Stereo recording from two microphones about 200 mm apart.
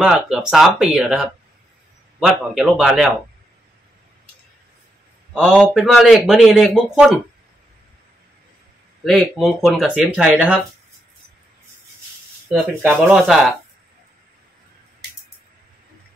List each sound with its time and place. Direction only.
0.0 s a man's voice: 5° right (ahead or behind)
5.3 s a man's voice: centre (ahead or behind)
9.0 s a man's voice: centre (ahead or behind)
12.4 s a man's voice: 5° right (ahead or behind)